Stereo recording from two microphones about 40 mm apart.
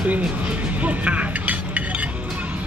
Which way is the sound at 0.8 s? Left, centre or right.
Right.